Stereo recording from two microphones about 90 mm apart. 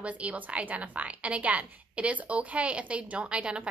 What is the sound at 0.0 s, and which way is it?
A woman's voice, 15° right (ahead or behind).